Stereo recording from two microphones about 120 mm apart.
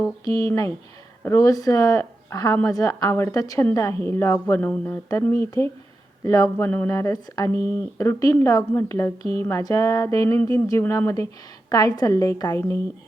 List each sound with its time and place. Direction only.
0.3 s speech: 30° left (ahead or behind)